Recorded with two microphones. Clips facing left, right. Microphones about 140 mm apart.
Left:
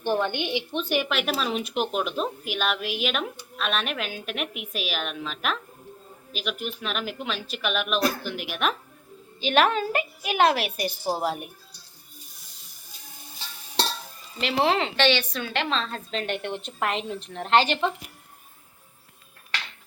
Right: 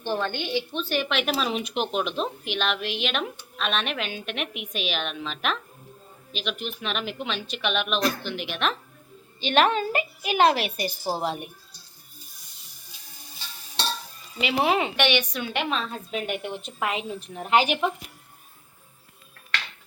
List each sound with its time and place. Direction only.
0.0 s a woman's voice: 15° left (ahead or behind)
1.0 s speech: centre (ahead or behind)
14.4 s a woman's voice: 10° right (ahead or behind)